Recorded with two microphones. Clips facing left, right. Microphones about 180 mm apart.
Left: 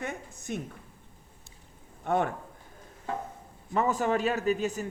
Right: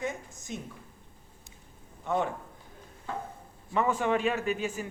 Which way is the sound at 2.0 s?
55° left (ahead or behind).